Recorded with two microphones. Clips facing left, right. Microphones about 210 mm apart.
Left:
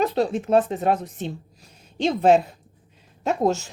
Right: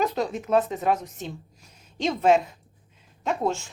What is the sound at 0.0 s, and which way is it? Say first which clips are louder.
A woman's voice: left 4 dB; 30° left (ahead or behind).